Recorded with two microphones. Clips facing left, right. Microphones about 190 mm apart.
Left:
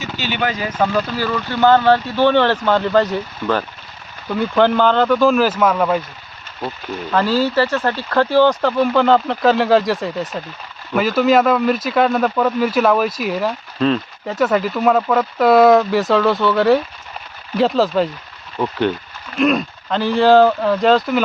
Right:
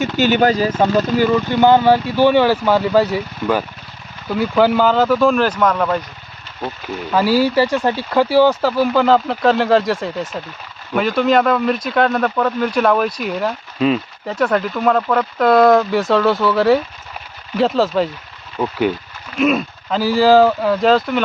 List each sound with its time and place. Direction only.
0.0 s speech: 45° right (ahead or behind)
1.1 s speech: 20° right (ahead or behind); by 6.0 s 5° left (ahead or behind)
7.1 s speech: 10° right (ahead or behind)